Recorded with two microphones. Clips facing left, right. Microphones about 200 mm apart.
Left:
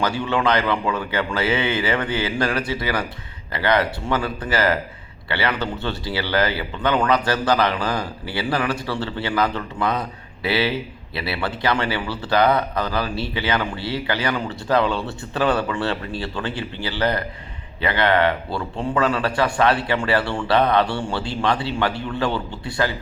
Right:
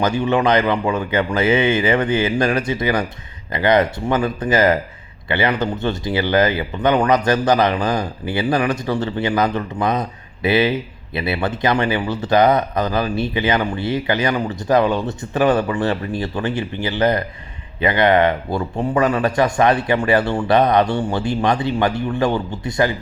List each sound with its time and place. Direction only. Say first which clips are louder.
0.0 s speech: right 4 dB; 20° right (ahead or behind)